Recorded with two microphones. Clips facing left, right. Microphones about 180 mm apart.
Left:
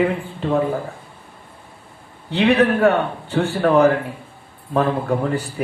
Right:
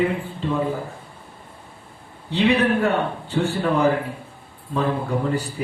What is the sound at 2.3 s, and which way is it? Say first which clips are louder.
Speech: left 3 dB; 60° left (ahead or behind).